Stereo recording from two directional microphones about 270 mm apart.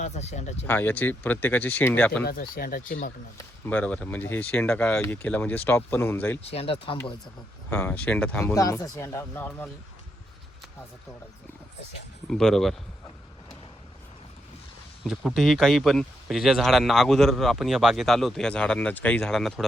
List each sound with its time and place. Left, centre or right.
0.0 s speech: left
0.7 s speech: centre
2.2 s speech: left
3.3 s speech: centre
6.5 s speech: left
7.7 s speech: centre
12.3 s speech: centre
15.0 s speech: centre